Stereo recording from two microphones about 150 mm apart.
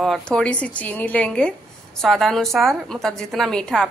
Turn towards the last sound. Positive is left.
turn(degrees=5)  # may be behind; listen again after turning